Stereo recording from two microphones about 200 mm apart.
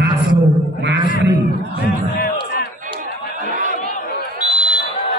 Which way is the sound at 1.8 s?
50° left (ahead or behind).